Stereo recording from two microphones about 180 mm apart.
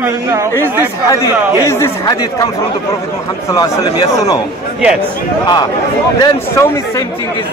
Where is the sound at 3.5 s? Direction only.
20° left (ahead or behind).